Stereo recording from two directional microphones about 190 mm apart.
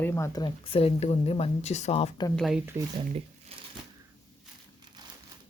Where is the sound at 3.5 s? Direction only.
30° right (ahead or behind).